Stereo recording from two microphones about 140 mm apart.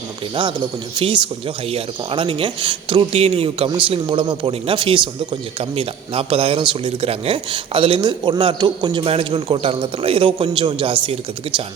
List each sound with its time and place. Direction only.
0.9 s a man's voice: 35° right (ahead or behind)